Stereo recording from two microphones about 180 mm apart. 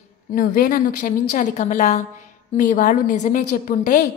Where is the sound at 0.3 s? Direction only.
55° left (ahead or behind).